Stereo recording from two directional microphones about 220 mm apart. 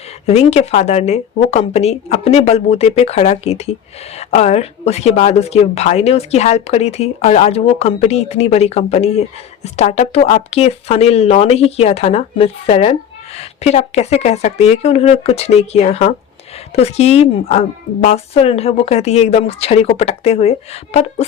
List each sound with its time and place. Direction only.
0.3 s speech: 30° left (ahead or behind)